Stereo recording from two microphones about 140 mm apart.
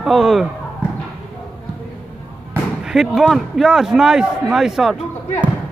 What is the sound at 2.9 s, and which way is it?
A man's voice, centre (ahead or behind).